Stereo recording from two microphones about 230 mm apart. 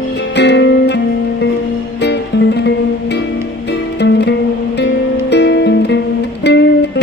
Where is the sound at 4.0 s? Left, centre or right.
Left.